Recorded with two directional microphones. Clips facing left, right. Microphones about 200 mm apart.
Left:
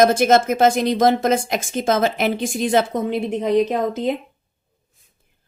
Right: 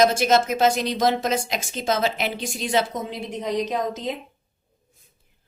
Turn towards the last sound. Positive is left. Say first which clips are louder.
# left 6 dB
turn(degrees=55)  # may be behind; listen again after turning